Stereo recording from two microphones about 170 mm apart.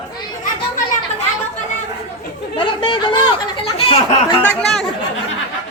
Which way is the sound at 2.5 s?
30° left (ahead or behind).